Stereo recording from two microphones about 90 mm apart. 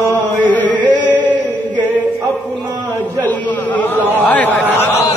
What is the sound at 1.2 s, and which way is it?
Chant, 15° right (ahead or behind).